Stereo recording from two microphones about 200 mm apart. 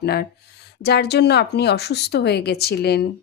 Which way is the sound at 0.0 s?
50° left (ahead or behind).